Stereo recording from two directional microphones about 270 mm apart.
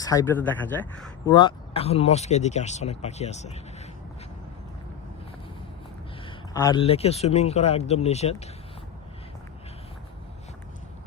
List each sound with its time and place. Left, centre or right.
0.0 s speech: centre
6.2 s speech: centre